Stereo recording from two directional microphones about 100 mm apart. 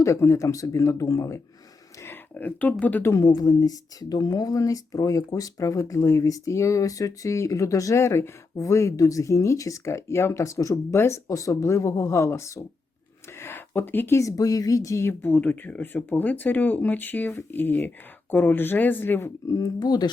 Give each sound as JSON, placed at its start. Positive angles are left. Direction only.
{"t": 0.0, "sound": "speech", "side_deg": 30}
{"t": 2.3, "sound": "speech", "side_deg": 15}
{"t": 3.1, "sound": "speech", "side_deg": 35}
{"t": 19.5, "sound": "speech", "side_deg": 35}